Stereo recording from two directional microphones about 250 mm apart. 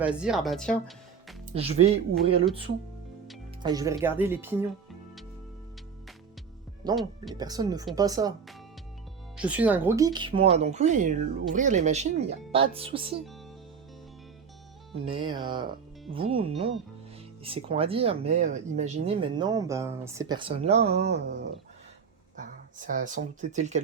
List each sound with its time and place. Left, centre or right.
0.0 s speech: centre
1.5 s speech: right
3.6 s speech: centre
6.8 s speech: centre
9.4 s speech: centre; by 13.1 s right
14.9 s speech: right
19.3 s speech: centre
20.8 s speech: right
22.4 s speech: right